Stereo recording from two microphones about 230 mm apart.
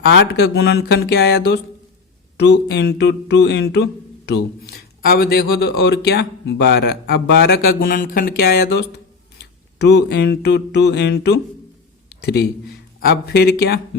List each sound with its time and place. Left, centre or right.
0.1 s speech: left
9.4 s a sound: left
12.0 s speech: left